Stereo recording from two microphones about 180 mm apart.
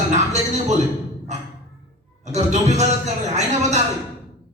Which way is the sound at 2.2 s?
40° right (ahead or behind).